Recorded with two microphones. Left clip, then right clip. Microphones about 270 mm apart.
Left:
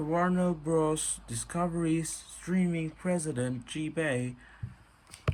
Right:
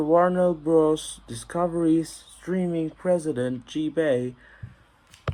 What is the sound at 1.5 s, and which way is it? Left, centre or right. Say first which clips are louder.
Speech: right 9 dB; centre.